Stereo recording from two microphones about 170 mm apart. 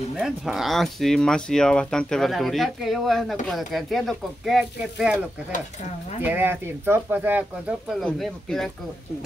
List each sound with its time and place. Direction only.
0.1 s speech: 5° right (ahead or behind)
6.2 s speech: 10° right (ahead or behind)
8.0 s speech: centre (ahead or behind)